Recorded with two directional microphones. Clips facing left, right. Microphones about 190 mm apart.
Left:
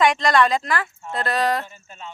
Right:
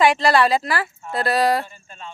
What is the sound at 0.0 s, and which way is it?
Speech, 5° right (ahead or behind).